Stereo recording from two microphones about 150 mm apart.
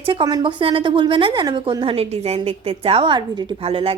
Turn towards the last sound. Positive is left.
turn(degrees=-40)  # may be behind; listen again after turning